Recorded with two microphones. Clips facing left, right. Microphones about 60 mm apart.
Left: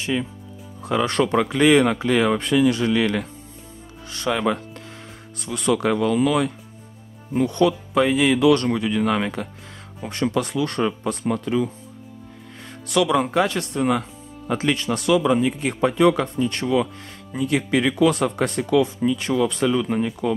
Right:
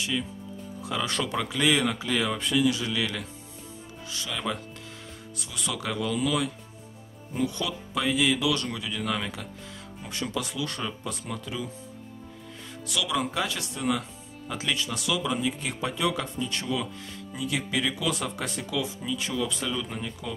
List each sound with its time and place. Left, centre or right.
0.0 s speech: left
12.8 s speech: left